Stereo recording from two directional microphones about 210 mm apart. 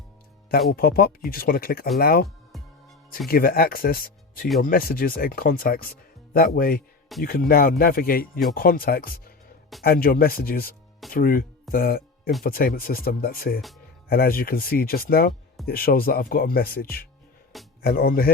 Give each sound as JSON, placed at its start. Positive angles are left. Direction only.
{"t": 0.7, "sound": "speech", "side_deg": 45}
{"t": 3.2, "sound": "speech", "side_deg": 45}